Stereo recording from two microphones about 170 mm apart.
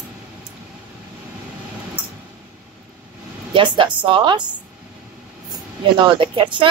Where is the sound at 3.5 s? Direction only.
30° right (ahead or behind).